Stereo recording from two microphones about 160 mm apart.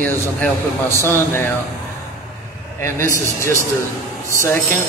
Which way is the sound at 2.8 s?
15° left (ahead or behind).